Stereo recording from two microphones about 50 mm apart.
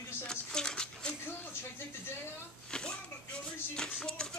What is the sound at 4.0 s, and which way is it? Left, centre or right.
Speech, centre.